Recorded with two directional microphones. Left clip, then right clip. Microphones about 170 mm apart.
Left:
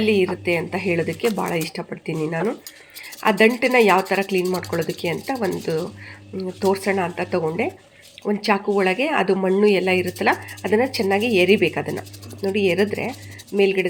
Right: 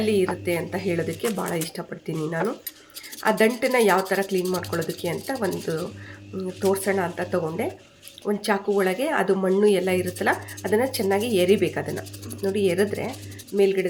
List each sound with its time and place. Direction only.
0.0 s speech: 5° left (ahead or behind)